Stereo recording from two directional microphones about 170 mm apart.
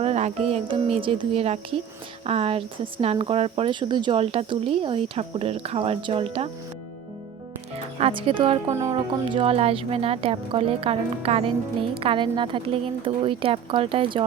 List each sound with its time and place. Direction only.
0.0 s speech: 40° right (ahead or behind)
7.9 s speech: 35° right (ahead or behind)
8.6 s speech: 15° right (ahead or behind)
8.9 s speech: 35° right (ahead or behind)